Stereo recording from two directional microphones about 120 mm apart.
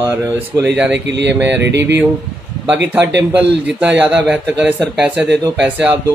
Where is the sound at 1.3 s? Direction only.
15° right (ahead or behind).